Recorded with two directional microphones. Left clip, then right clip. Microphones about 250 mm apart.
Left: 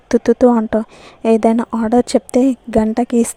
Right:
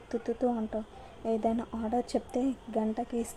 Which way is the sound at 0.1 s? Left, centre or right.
Left.